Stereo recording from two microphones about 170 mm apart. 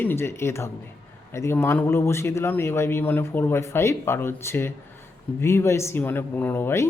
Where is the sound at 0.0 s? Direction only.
15° left (ahead or behind).